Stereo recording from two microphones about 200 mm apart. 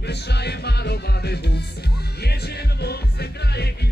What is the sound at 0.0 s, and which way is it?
Music, 55° left (ahead or behind).